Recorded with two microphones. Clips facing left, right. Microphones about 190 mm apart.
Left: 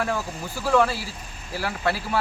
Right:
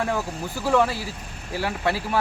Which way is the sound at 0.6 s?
20° right (ahead or behind).